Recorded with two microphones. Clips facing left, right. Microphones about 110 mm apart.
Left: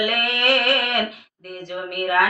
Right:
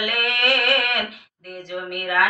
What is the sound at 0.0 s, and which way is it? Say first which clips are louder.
Music: left 2 dB; 40° left (ahead or behind).